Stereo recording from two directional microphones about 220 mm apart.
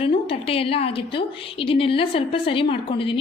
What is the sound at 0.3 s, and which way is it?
A woman's voice, 25° left (ahead or behind).